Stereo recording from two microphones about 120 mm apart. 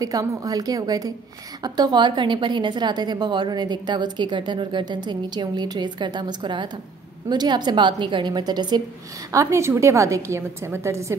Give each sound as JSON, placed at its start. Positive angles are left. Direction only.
{"t": 0.0, "sound": "a woman's voice", "side_deg": -30}
{"t": 9.3, "sound": "a woman's voice", "side_deg": -25}